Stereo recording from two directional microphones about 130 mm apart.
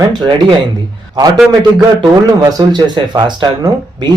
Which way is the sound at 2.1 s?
30° right (ahead or behind).